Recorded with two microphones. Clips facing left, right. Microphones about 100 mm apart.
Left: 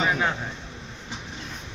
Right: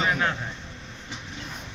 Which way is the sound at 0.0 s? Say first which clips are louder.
Left 1 dB; 15° left (ahead or behind).